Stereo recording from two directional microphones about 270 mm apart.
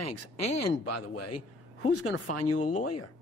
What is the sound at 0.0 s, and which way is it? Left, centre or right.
Speech, left.